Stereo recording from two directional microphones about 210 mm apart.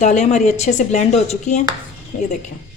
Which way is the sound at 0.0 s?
35° left (ahead or behind).